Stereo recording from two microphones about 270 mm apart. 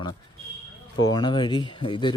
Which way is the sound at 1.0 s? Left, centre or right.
Centre.